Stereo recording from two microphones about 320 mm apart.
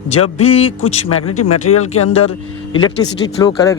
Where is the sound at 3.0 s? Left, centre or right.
Left.